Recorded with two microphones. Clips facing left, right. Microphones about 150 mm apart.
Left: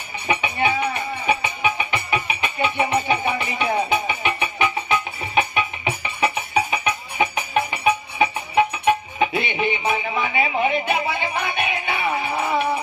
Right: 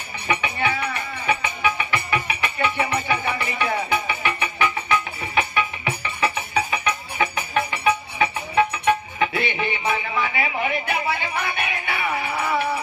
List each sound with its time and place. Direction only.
0.3 s music: 20° left (ahead or behind)